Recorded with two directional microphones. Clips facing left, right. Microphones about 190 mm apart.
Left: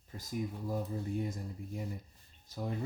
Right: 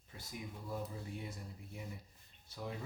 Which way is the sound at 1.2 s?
45° left (ahead or behind).